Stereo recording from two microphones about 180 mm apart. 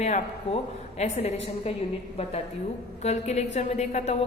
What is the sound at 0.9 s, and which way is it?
Speech, 40° left (ahead or behind).